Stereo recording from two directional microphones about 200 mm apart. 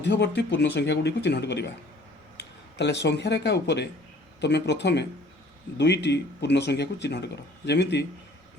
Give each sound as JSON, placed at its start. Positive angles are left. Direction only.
{"t": 0.0, "sound": "speech", "side_deg": 60}